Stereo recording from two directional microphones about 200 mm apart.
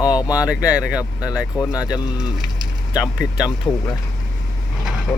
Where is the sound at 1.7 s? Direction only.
5° right (ahead or behind).